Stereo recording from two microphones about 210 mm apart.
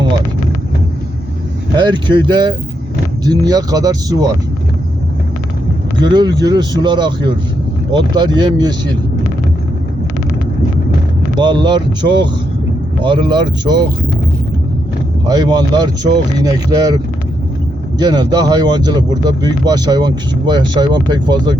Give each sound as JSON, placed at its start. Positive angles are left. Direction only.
{"t": 1.7, "sound": "speech", "side_deg": -20}
{"t": 6.0, "sound": "speech", "side_deg": -20}
{"t": 11.3, "sound": "speech", "side_deg": -20}
{"t": 15.3, "sound": "speech", "side_deg": -20}
{"t": 18.0, "sound": "speech", "side_deg": -20}